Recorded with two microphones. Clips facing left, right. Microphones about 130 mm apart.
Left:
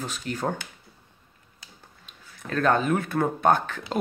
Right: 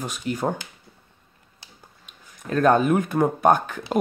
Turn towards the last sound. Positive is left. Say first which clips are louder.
# right 3 dB
turn(degrees=-15)  # may be behind; listen again after turning